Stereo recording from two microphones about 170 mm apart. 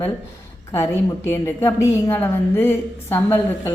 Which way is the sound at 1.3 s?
15° left (ahead or behind).